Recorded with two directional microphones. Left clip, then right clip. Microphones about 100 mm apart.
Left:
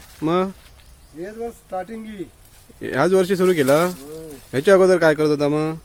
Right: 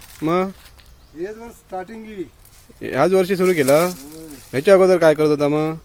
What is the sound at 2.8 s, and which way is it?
Speech, centre (ahead or behind).